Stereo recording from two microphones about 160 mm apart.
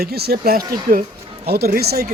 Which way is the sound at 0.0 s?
75° right (ahead or behind).